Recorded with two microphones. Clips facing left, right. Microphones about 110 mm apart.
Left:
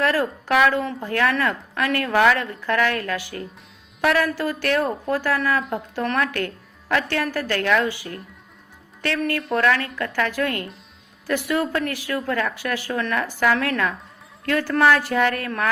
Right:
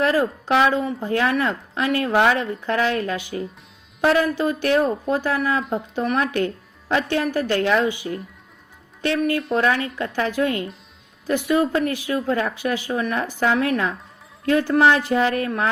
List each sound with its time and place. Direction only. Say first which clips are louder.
0.0 s speech: right 2 dB; 20° right (ahead or behind)